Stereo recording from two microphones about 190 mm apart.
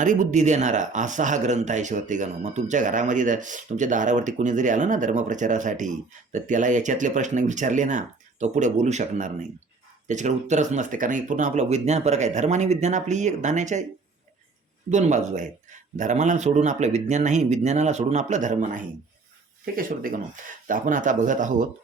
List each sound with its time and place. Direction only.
0.0 s speech: 40° right (ahead or behind)
14.8 s speech: 40° right (ahead or behind)